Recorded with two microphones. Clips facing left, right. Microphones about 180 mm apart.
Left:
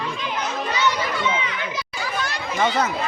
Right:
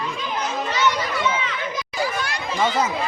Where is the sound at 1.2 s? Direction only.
15° left (ahead or behind).